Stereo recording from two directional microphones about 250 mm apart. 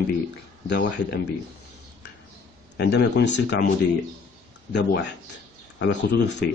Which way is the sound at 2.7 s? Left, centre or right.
Left.